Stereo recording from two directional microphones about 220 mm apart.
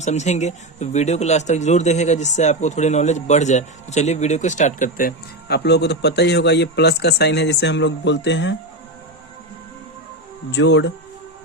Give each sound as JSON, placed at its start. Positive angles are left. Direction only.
{"t": 0.0, "sound": "speech", "side_deg": 30}
{"t": 10.5, "sound": "speech", "side_deg": 55}